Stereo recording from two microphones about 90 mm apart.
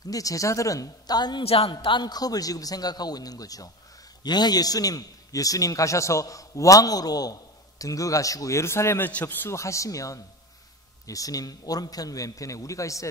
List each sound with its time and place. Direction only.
0.0 s a man's voice: 40° left (ahead or behind)
1.4 s a man's voice: 90° left; by 9.6 s 25° left (ahead or behind)
9.6 s a man's voice: 35° left (ahead or behind)